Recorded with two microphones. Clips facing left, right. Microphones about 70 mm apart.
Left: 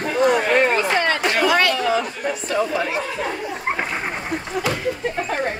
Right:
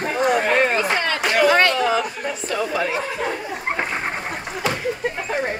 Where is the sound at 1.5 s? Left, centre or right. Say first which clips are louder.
Right 1 dB; right.